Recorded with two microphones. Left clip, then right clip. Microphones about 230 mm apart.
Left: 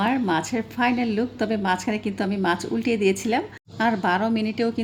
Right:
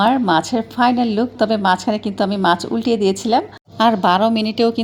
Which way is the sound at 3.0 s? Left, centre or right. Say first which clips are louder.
Right 6 dB; centre.